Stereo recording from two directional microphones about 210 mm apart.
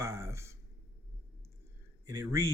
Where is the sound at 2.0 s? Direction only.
15° right (ahead or behind).